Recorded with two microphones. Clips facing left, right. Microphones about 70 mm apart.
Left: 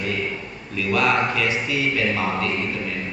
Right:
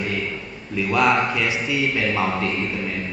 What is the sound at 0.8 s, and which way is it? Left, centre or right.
A man's voice, centre.